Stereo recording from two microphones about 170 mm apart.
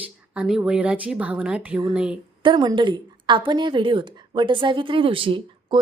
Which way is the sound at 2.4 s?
30° right (ahead or behind).